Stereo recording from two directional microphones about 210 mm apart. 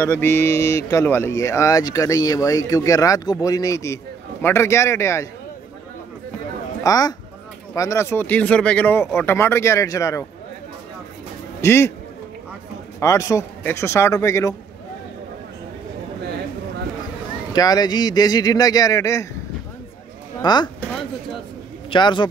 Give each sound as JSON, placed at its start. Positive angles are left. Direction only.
{"t": 0.0, "sound": "speech", "side_deg": 10}
{"t": 6.8, "sound": "speech", "side_deg": 15}
{"t": 11.6, "sound": "speech", "side_deg": 10}
{"t": 13.0, "sound": "speech", "side_deg": 15}
{"t": 17.5, "sound": "speech", "side_deg": 20}
{"t": 20.4, "sound": "a man's voice", "side_deg": 20}
{"t": 21.9, "sound": "a man's voice", "side_deg": 20}